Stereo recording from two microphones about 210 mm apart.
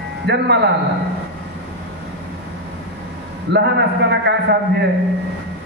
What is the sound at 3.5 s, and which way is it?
A man's voice, 55° right (ahead or behind).